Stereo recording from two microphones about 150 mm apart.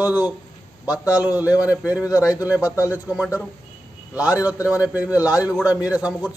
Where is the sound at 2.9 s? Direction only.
5° right (ahead or behind).